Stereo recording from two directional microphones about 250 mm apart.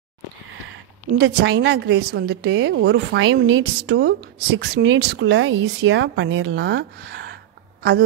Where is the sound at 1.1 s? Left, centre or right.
Right.